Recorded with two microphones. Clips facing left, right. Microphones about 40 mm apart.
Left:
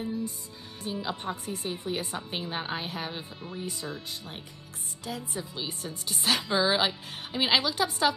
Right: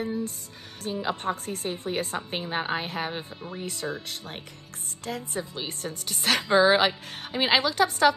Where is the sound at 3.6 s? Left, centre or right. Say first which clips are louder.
Right 4 dB; right.